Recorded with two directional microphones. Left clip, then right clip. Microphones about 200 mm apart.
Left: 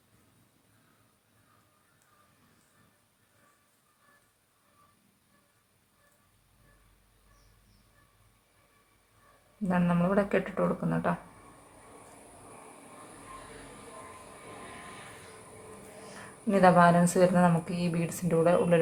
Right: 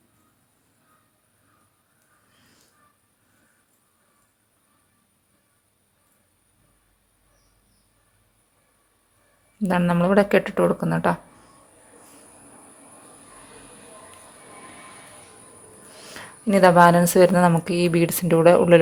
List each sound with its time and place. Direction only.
9.6 s speech: 40° right (ahead or behind)
16.5 s speech: 40° right (ahead or behind)